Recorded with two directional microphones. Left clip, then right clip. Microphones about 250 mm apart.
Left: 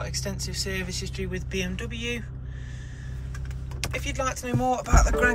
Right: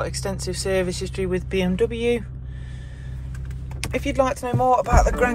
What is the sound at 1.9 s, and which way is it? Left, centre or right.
Music, right.